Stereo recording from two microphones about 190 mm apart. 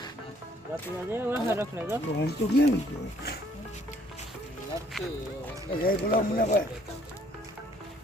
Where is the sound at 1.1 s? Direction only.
10° right (ahead or behind).